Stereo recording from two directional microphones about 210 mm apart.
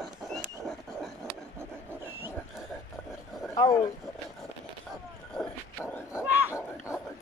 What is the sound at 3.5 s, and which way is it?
Speech, 20° left (ahead or behind).